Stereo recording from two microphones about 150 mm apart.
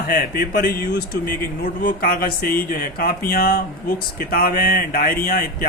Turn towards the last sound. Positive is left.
turn(degrees=70)  # may be behind; listen again after turning